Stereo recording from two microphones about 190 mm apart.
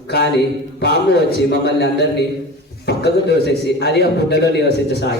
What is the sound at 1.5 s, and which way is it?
A man's voice, 60° left (ahead or behind).